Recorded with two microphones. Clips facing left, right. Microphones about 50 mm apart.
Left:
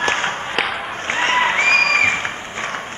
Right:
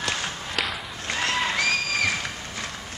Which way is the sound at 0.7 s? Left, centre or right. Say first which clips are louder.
Left 8 dB; left.